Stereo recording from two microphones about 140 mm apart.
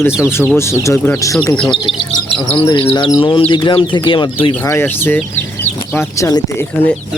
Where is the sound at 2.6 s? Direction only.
35° left (ahead or behind).